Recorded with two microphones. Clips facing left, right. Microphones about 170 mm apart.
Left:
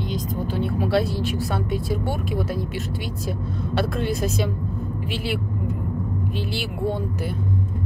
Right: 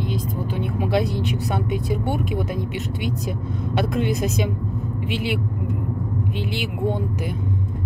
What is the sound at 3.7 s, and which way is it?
Speech, 20° right (ahead or behind).